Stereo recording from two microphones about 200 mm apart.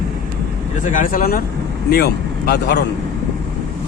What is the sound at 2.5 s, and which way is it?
Speech, 55° left (ahead or behind).